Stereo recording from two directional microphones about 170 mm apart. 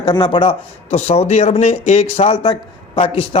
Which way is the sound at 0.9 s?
40° left (ahead or behind).